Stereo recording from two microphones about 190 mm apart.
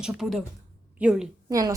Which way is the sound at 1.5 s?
15° right (ahead or behind).